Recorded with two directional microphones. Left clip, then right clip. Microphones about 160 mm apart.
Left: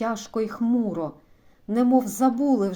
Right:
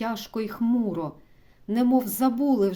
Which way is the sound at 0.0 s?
20° right (ahead or behind).